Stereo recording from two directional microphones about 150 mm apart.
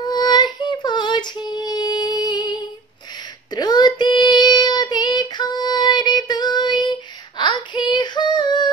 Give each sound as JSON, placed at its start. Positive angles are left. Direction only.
{"t": 0.0, "sound": "female singing", "side_deg": 30}
{"t": 3.5, "sound": "child singing", "side_deg": 25}